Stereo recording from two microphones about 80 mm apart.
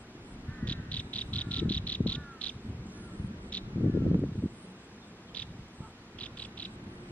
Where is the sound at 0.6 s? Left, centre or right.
Centre.